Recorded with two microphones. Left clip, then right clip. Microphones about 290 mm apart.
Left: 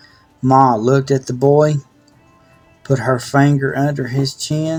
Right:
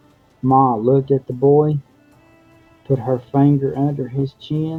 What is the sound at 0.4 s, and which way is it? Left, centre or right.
Speech, left.